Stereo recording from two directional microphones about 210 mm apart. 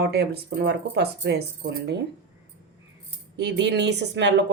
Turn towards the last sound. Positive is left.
turn(degrees=-55)  # may be behind; listen again after turning